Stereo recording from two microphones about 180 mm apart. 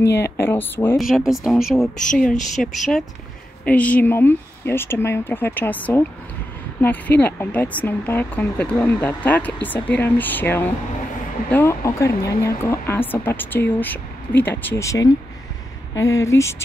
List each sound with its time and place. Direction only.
0.2 s speech: 10° left (ahead or behind)
0.9 s speech: centre (ahead or behind); by 16.6 s 15° left (ahead or behind)